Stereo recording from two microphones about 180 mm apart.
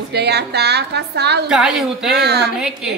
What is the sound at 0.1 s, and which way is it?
A woman's voice, 65° right (ahead or behind).